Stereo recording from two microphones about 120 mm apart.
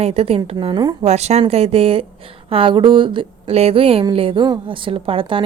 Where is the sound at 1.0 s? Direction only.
65° right (ahead or behind).